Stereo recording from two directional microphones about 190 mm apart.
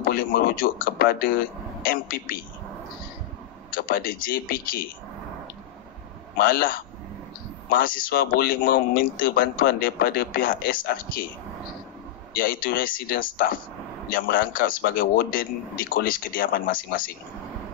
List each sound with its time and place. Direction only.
0.0 s speech: 50° left (ahead or behind)
3.7 s speech: 50° left (ahead or behind)
6.4 s speech: 50° left (ahead or behind)
12.4 s speech: 50° left (ahead or behind)